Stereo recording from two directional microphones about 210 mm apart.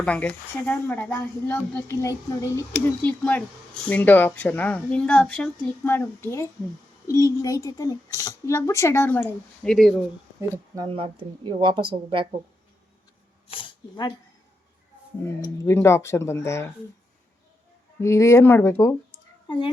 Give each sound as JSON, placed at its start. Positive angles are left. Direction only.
{"t": 0.0, "sound": "speech", "side_deg": 5}
{"t": 10.8, "sound": "speech", "side_deg": -25}
{"t": 13.5, "sound": "speech", "side_deg": 20}
{"t": 15.2, "sound": "speech", "side_deg": 15}
{"t": 18.0, "sound": "speech", "side_deg": 15}